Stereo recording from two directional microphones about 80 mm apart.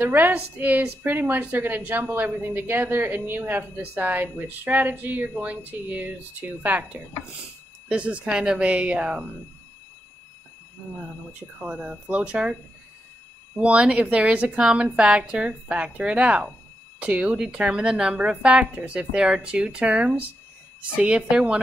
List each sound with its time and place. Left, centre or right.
0.0 s a woman's voice: right
11.3 s a woman's voice: centre
13.6 s a woman's voice: centre